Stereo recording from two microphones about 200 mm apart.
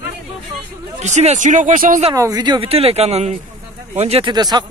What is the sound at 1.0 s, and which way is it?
Speech, 35° right (ahead or behind).